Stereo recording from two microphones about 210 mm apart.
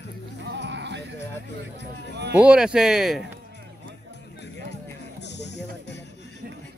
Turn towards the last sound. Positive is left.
turn(degrees=55)  # may be behind; listen again after turning